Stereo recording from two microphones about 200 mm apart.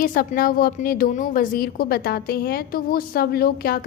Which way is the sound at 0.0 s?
45° left (ahead or behind).